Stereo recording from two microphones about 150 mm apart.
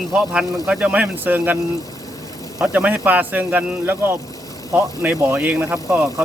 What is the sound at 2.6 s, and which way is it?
Speech, 10° right (ahead or behind).